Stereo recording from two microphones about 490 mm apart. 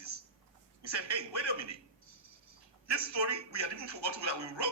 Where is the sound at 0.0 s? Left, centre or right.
Right.